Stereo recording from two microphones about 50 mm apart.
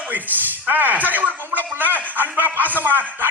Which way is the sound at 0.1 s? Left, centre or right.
Right.